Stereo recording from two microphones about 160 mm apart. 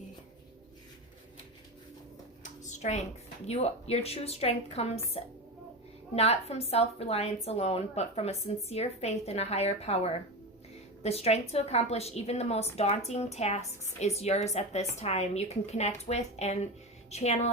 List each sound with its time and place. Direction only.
2.4 s a woman's voice: 50° left (ahead or behind)